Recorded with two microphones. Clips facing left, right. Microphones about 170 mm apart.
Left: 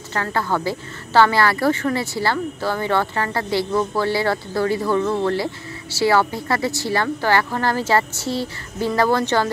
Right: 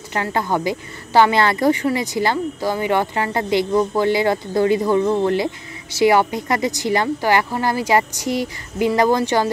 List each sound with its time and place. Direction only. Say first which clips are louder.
0.1 s speech: right 2 dB; 15° right (ahead or behind)